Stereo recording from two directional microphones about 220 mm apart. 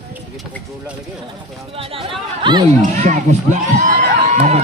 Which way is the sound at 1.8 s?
25° right (ahead or behind).